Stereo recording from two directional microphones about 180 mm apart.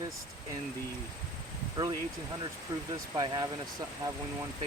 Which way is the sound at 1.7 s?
20° right (ahead or behind).